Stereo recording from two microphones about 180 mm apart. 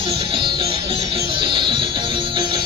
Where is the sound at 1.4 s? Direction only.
30° right (ahead or behind).